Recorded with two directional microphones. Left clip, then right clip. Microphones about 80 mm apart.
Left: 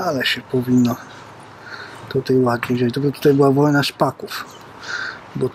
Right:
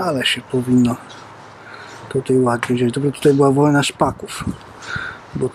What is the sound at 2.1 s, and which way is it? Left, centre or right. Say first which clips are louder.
Speech: right 1 dB; centre.